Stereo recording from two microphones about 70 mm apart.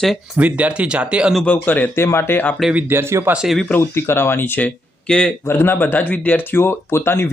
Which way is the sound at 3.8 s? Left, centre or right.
Left.